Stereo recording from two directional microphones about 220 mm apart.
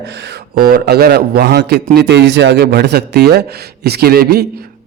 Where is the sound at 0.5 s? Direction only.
45° right (ahead or behind).